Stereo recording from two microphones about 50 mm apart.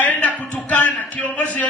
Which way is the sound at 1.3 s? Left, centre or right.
Left.